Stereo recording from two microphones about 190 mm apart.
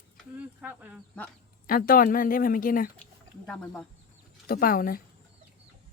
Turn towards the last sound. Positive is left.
turn(degrees=50)  # may be behind; listen again after turning